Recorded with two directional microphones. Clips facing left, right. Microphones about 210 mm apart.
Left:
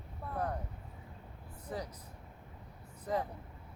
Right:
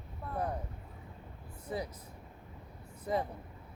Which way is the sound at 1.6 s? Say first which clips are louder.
Right 3 dB; 10° right (ahead or behind).